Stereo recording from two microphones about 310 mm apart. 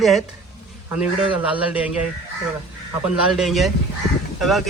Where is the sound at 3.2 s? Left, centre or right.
Centre.